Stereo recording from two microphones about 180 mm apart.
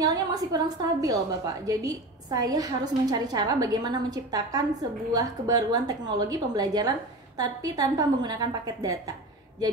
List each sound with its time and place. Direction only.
0.0 s a woman's voice: 20° right (ahead or behind)